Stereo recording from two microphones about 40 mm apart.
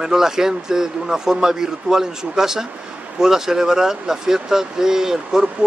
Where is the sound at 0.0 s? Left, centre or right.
Centre.